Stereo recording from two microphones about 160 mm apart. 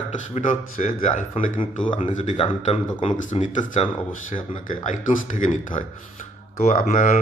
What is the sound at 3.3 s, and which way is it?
Speech, 50° left (ahead or behind).